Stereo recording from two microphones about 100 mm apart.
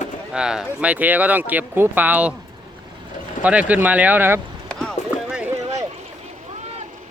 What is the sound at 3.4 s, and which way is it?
Speech, 15° right (ahead or behind).